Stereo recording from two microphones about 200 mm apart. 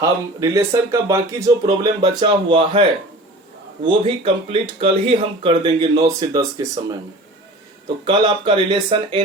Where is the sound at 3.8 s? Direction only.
25° right (ahead or behind).